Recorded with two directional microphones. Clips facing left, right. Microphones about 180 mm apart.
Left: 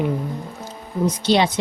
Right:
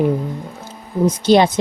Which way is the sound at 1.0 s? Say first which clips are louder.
Right 5 dB; 45° right (ahead or behind).